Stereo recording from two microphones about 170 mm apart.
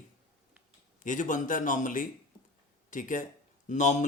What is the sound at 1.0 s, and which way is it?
Speech, 50° left (ahead or behind).